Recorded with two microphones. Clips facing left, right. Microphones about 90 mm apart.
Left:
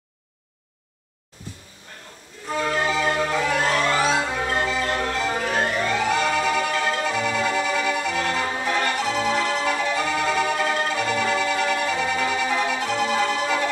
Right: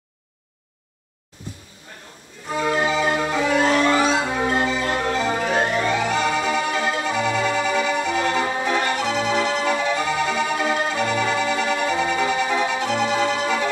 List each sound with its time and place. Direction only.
2.5 s music: 5° right (ahead or behind)